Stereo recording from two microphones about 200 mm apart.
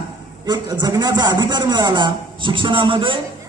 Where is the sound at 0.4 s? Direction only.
20° right (ahead or behind).